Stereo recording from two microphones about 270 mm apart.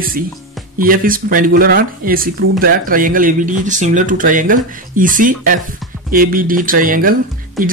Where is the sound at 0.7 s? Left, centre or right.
Right.